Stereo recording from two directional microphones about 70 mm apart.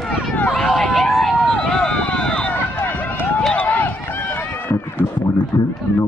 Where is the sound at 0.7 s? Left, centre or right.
Centre.